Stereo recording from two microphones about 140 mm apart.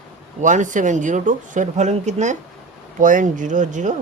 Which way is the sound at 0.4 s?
65° right (ahead or behind).